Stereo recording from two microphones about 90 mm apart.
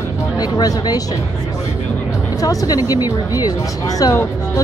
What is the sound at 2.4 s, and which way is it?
Speech, 45° left (ahead or behind).